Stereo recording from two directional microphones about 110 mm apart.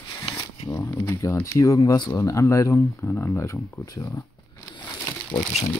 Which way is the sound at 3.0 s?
15° left (ahead or behind).